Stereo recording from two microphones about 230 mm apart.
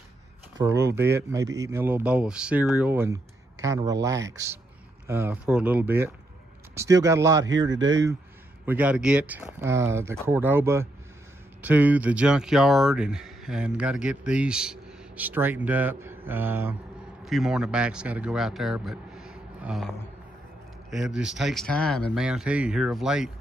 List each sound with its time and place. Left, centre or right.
0.6 s speech: centre
7.7 s speech: right
8.6 s a man's voice: centre
20.9 s speech: centre